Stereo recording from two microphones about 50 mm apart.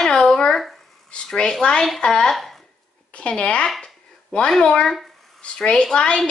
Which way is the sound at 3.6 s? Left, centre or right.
Centre.